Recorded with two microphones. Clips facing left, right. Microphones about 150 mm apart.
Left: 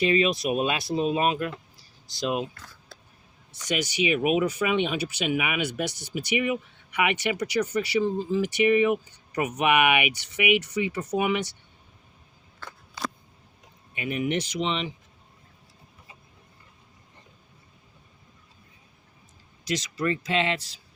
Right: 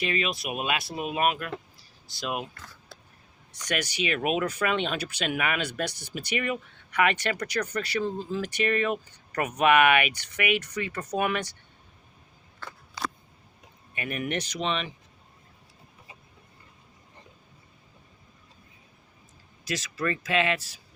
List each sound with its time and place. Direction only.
0.0 s speech: 30° left (ahead or behind)
4.0 s speech: 10° left (ahead or behind)
5.9 s speech: 60° right (ahead or behind)
6.3 s speech: 10° left (ahead or behind)
13.9 s speech: 20° left (ahead or behind)
19.6 s speech: 20° left (ahead or behind)